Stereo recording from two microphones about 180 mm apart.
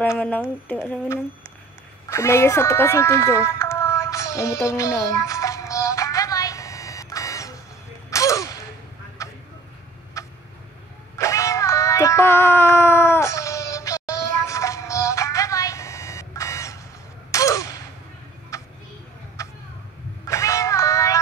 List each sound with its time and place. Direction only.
0.0 s speech: 10° left (ahead or behind)
2.0 s a sound: 15° left (ahead or behind)
10.2 s tick-tock: 15° left (ahead or behind)
11.1 s music: 15° left (ahead or behind)
17.3 s a sound: 15° left (ahead or behind)
20.2 s music: 15° left (ahead or behind)